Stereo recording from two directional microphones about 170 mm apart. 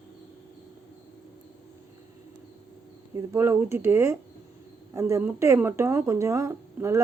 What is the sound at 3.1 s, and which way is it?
Speech, 15° right (ahead or behind).